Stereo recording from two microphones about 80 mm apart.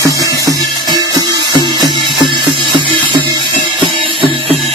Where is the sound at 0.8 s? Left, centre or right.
Right.